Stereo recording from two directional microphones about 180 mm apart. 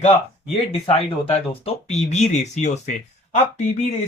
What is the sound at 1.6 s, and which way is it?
Speech, 40° left (ahead or behind).